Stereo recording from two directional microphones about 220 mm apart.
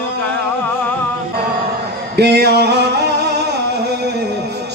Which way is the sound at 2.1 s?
50° right (ahead or behind).